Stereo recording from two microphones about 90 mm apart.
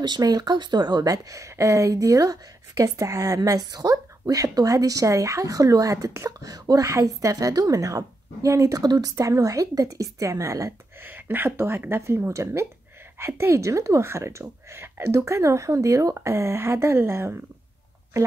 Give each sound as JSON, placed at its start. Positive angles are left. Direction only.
{"t": 0.0, "sound": "speech", "side_deg": -50}
{"t": 11.1, "sound": "speech", "side_deg": -20}